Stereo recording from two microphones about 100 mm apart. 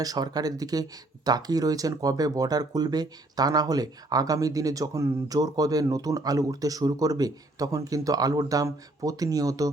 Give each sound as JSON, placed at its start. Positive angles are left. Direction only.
{"t": 0.0, "sound": "speech", "side_deg": -40}